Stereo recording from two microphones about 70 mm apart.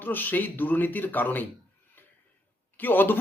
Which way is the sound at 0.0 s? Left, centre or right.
Left.